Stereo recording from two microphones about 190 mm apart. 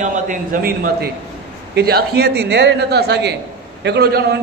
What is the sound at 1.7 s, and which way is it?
A man's voice, 55° right (ahead or behind).